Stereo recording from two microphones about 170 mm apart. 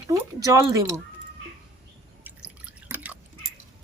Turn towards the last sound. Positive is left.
turn(degrees=-10)  # may be behind; listen again after turning